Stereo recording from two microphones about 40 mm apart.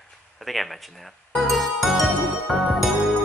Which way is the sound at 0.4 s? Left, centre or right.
Centre.